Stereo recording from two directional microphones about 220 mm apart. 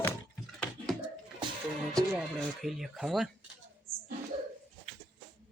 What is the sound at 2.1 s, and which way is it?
Speech, centre (ahead or behind).